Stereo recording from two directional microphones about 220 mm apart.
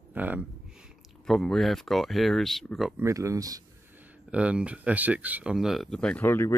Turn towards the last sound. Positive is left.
turn(degrees=10)  # may be behind; listen again after turning